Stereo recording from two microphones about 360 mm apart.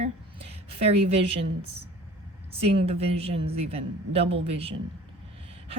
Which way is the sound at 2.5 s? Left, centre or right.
Centre.